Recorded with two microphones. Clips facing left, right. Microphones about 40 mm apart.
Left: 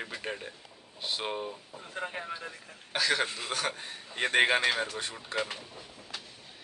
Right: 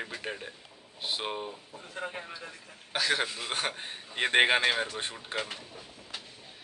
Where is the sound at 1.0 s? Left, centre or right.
Centre.